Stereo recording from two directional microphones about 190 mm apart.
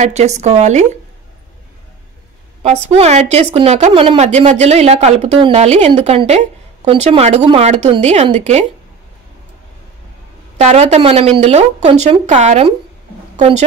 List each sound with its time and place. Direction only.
0.0 s a woman's voice: 35° right (ahead or behind)
2.6 s a woman's voice: 35° right (ahead or behind)
10.6 s a woman's voice: 35° right (ahead or behind)